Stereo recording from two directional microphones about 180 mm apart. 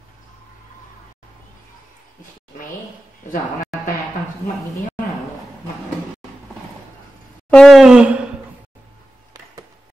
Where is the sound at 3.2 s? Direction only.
45° left (ahead or behind).